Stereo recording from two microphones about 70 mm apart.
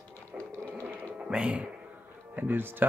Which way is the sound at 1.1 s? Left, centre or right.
Centre.